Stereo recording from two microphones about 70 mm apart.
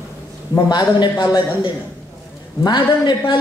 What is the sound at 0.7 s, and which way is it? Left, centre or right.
Speech, left.